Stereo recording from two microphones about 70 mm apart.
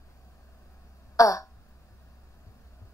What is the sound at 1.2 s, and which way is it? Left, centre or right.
Throat clearing, left.